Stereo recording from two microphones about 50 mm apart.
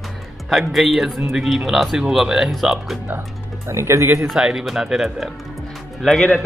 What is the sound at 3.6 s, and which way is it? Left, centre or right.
Speech, right.